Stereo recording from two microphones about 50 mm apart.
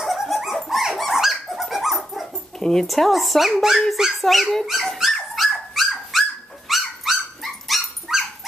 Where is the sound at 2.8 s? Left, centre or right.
Centre.